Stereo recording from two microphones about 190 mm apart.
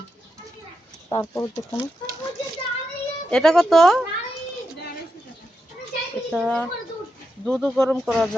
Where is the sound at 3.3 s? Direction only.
5° left (ahead or behind).